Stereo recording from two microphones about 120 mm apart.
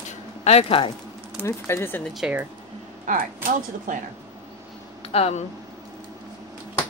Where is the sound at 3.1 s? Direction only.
90° right.